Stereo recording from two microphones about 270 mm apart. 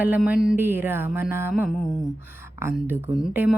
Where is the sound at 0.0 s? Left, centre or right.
Centre.